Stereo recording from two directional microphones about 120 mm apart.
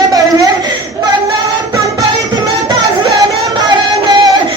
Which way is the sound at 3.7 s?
40° right (ahead or behind).